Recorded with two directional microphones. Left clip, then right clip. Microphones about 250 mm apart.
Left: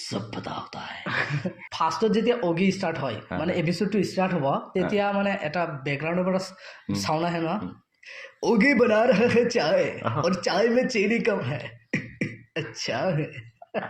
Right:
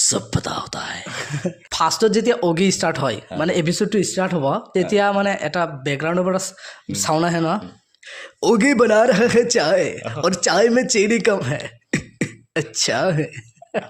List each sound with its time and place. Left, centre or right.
0.0 s speech: right
1.0 s throat clearing: centre
1.4 s speech: right